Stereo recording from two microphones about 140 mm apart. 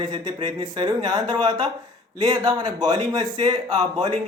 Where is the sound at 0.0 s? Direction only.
30° right (ahead or behind).